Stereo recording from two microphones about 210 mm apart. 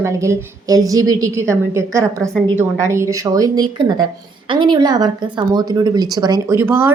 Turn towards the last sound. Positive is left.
turn(degrees=-10)  # may be behind; listen again after turning